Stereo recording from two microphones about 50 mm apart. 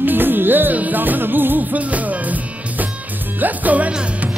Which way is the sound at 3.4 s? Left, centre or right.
Right.